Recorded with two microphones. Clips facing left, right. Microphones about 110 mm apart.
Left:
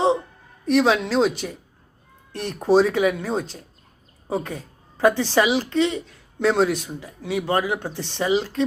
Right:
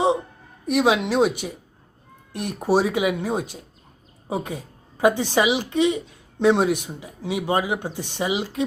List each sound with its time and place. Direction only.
0.6 s a woman's voice: 15° right (ahead or behind)